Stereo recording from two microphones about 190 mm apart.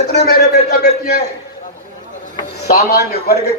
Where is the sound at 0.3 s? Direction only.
55° left (ahead or behind).